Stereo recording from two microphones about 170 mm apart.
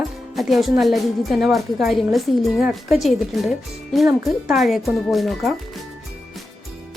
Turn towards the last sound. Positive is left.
turn(degrees=0)  # may be behind; listen again after turning